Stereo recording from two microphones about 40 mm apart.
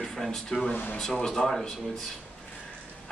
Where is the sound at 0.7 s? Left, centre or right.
Left.